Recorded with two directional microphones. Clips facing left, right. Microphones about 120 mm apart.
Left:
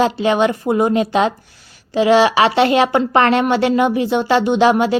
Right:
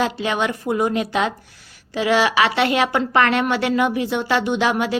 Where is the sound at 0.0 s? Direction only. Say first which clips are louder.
Left 6 dB; 30° left (ahead or behind).